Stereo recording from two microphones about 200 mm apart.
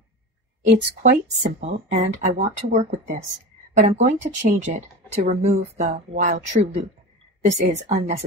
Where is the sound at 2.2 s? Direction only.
35° right (ahead or behind).